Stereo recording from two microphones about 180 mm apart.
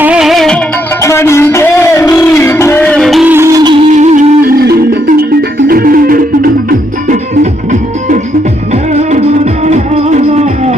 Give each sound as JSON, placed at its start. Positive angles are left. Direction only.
{"t": 0.0, "sound": "music", "side_deg": -5}
{"t": 1.0, "sound": "music", "side_deg": 15}
{"t": 3.2, "sound": "music", "side_deg": -15}
{"t": 3.9, "sound": "music", "side_deg": -40}
{"t": 9.0, "sound": "music", "side_deg": -40}